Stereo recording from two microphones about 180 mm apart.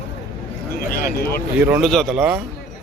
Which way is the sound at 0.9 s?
55° left (ahead or behind).